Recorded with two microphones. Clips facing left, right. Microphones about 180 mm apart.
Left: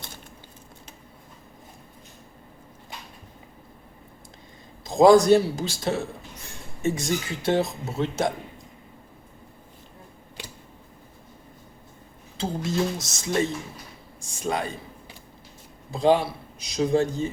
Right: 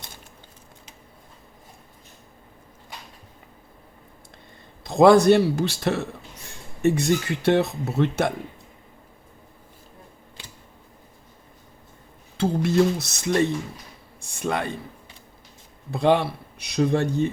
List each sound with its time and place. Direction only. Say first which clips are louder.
4.8 s speech: right 1 dB; 65° right (ahead or behind)
12.4 s speech: right 6 dB; 60° right (ahead or behind)
15.9 s speech: even; 60° right (ahead or behind)